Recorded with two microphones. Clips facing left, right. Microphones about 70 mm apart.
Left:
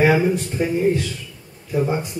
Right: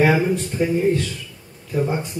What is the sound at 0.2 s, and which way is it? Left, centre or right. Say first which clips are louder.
Speech: left 1 dB; centre.